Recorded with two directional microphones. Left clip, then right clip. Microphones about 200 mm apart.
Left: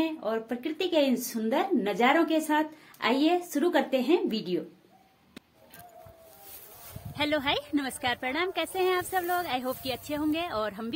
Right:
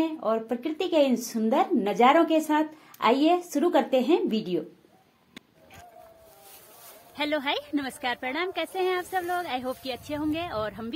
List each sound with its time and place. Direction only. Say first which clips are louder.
0.0 s speech: right 3 dB; 10° right (ahead or behind)
7.2 s a woman's voice: even; centre (ahead or behind)